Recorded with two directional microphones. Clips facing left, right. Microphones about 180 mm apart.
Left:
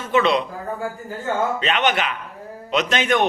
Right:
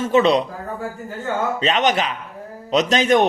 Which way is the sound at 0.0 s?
40° right (ahead or behind).